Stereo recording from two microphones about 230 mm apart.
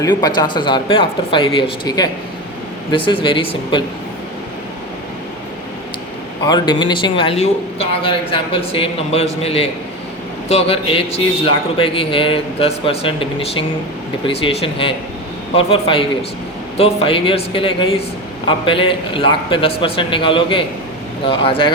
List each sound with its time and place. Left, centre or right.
0.0 s speech: centre
6.4 s speech: centre